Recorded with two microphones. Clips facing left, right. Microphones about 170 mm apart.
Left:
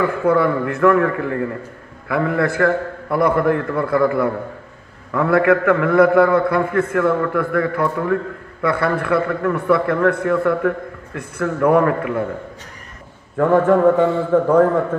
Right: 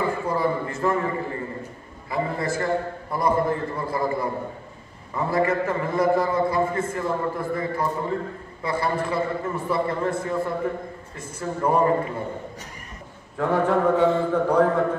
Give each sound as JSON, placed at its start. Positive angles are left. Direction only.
{"t": 0.0, "sound": "a man's voice", "side_deg": 65}
{"t": 13.4, "sound": "a man's voice", "side_deg": 50}